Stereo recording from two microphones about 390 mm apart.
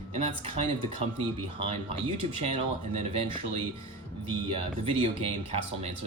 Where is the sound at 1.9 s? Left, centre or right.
Centre.